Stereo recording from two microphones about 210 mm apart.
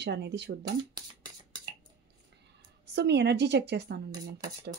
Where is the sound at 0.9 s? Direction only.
20° right (ahead or behind).